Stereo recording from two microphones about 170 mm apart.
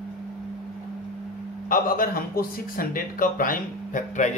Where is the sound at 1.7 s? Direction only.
55° left (ahead or behind).